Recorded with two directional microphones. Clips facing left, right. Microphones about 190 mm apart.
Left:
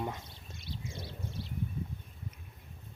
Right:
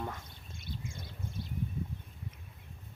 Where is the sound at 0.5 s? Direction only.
50° right (ahead or behind).